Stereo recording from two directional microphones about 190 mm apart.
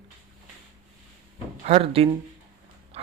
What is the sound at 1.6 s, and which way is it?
Speech, 30° right (ahead or behind).